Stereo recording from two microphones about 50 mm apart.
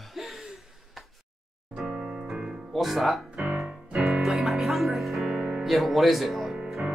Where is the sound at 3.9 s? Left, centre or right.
Centre.